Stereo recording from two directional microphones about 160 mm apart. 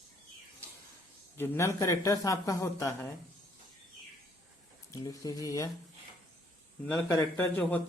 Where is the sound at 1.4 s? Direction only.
15° left (ahead or behind).